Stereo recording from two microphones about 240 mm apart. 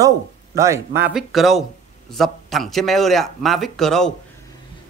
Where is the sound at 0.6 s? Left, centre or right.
Centre.